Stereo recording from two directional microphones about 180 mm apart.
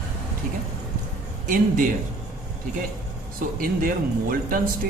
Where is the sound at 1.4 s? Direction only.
50° right (ahead or behind).